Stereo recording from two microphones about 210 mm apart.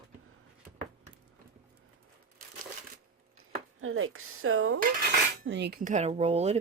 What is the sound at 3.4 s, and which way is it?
Speech, 75° right (ahead or behind).